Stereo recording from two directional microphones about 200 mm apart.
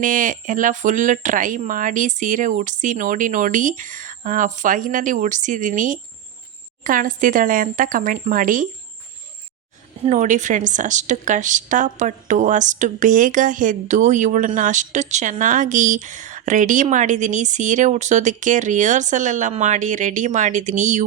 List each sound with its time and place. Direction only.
0.0 s a woman's voice: 40° right (ahead or behind)
10.0 s a woman's voice: 35° right (ahead or behind)